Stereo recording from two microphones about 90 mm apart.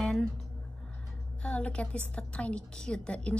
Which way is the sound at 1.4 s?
15° left (ahead or behind).